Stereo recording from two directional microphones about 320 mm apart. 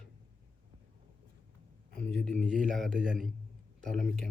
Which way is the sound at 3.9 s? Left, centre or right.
Centre.